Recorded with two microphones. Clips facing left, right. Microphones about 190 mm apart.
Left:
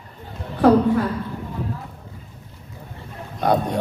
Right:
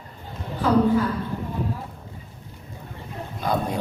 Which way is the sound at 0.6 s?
65° left (ahead or behind).